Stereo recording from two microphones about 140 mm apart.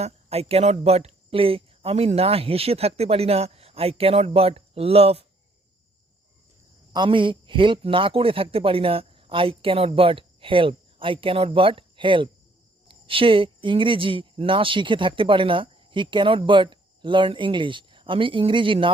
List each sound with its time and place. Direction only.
0.0 s speech: 45° right (ahead or behind)
6.9 s speech: 35° right (ahead or behind)